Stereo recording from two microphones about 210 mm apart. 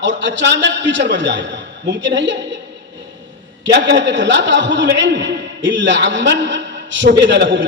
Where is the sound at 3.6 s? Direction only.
60° right (ahead or behind).